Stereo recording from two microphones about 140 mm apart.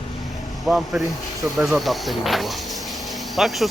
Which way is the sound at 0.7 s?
5° right (ahead or behind).